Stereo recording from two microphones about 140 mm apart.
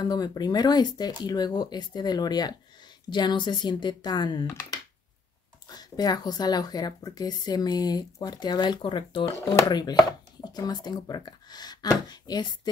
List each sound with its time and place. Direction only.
0.0 s speech: 30° left (ahead or behind)
5.7 s speech: 30° left (ahead or behind)